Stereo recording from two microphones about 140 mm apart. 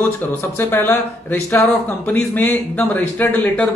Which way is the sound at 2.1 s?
10° left (ahead or behind).